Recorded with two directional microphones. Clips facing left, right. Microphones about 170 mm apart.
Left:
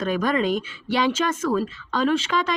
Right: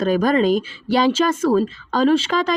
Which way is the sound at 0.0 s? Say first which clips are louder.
Right 6 dB; 40° right (ahead or behind).